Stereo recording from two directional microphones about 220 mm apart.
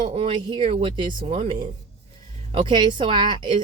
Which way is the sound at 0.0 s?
25° right (ahead or behind).